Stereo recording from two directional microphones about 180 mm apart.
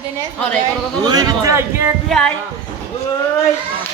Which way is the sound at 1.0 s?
20° right (ahead or behind).